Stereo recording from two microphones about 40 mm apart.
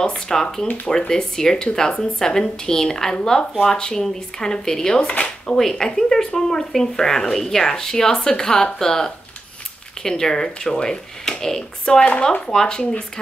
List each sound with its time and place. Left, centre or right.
0.0 s speech: centre
12.0 s speech: left